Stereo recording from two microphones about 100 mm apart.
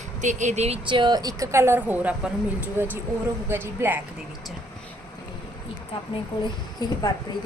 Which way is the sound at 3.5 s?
20° right (ahead or behind).